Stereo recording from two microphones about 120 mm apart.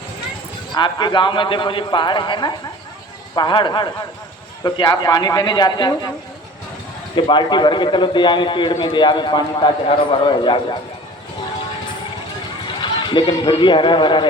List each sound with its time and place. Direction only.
0.7 s a man's voice: 40° left (ahead or behind)
7.2 s a man's voice: 40° left (ahead or behind)
12.8 s speech: 40° left (ahead or behind)